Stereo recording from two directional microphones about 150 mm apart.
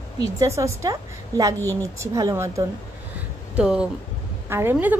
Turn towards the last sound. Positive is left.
turn(degrees=-15)  # may be behind; listen again after turning